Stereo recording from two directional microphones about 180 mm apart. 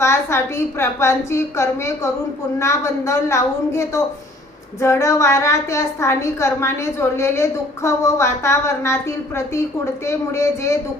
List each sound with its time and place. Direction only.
0.0 s a woman's voice: 15° left (ahead or behind)